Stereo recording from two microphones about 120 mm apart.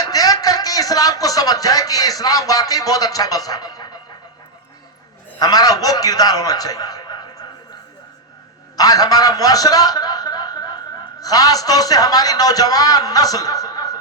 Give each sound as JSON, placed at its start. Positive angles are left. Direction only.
{"t": 0.0, "sound": "speech", "side_deg": 30}
{"t": 5.4, "sound": "a man's voice", "side_deg": 30}
{"t": 8.7, "sound": "chuckle", "side_deg": 30}
{"t": 11.2, "sound": "a man's voice", "side_deg": 30}